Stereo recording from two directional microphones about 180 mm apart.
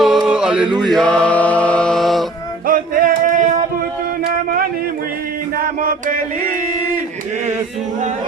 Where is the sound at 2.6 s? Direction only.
50° right (ahead or behind).